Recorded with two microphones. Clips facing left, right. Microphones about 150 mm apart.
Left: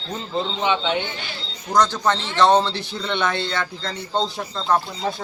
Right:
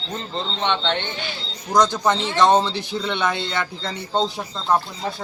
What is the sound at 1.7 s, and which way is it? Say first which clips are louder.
Speech: right 1 dB; 15° right (ahead or behind).